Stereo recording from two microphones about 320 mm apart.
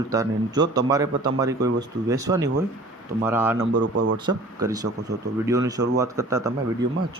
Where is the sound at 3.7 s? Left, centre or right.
Right.